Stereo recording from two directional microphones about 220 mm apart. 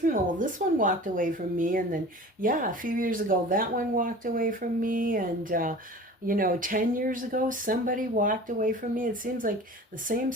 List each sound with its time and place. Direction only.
0.0 s speech: 40° right (ahead or behind)